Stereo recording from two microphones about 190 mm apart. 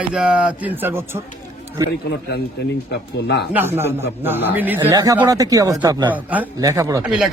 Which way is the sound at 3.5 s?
10° right (ahead or behind).